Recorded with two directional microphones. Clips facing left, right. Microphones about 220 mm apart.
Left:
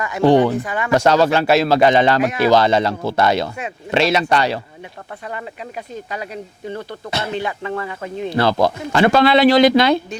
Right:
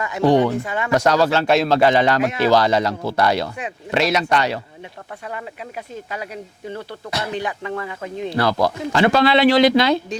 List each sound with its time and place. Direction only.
0.2 s speech: 30° left (ahead or behind)
0.6 s speech: 25° right (ahead or behind)
0.9 s speech: 30° left (ahead or behind)
1.5 s speech: 5° left (ahead or behind)
1.8 s speech: 20° left (ahead or behind)
5.9 s speech: 5° right (ahead or behind)
7.1 s speech: 25° left (ahead or behind)
7.3 s speech: 15° right (ahead or behind)
8.4 s speech: 25° left (ahead or behind)
8.9 s speech: 55° left (ahead or behind)